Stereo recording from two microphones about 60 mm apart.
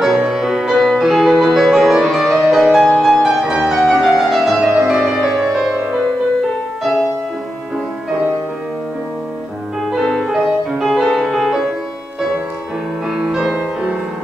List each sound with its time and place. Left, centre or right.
0.0 s music: centre
10.0 s music: centre
10.4 s music: centre
13.1 s music: centre